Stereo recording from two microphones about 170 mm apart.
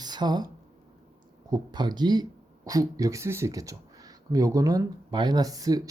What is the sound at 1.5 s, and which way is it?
Speech, 25° right (ahead or behind).